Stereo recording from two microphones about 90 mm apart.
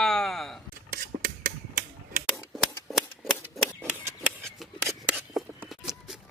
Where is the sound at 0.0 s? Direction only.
5° left (ahead or behind).